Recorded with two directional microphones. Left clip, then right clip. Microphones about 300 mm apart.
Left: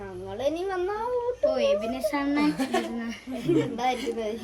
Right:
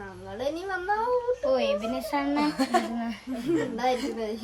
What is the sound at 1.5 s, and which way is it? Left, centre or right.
Speech, right.